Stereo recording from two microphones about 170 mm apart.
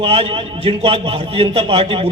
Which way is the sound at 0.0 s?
35° right (ahead or behind).